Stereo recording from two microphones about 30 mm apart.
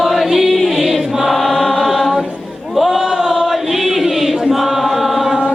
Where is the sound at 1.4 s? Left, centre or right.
Centre.